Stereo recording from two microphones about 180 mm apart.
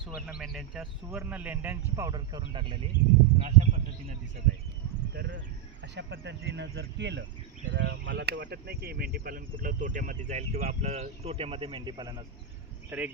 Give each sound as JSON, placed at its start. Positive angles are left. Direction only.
{"t": 0.0, "sound": "speech", "side_deg": 0}
{"t": 5.1, "sound": "speech", "side_deg": -65}
{"t": 5.8, "sound": "speech", "side_deg": -75}
{"t": 7.7, "sound": "speech", "side_deg": -90}
{"t": 12.9, "sound": "speech", "side_deg": -10}